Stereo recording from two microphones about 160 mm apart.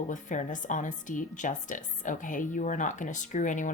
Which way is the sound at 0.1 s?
50° left (ahead or behind).